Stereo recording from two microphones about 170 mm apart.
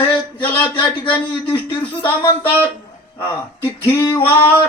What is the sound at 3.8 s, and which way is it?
Speech, 10° left (ahead or behind).